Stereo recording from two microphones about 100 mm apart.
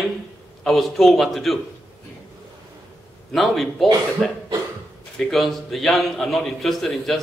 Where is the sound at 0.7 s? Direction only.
Centre (ahead or behind).